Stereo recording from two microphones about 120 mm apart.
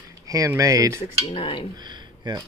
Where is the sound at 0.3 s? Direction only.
30° right (ahead or behind).